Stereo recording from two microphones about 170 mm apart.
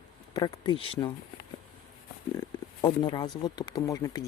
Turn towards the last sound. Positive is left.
turn(degrees=20)  # may be behind; listen again after turning